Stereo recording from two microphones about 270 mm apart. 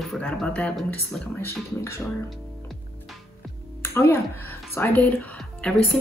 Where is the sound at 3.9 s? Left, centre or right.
Centre.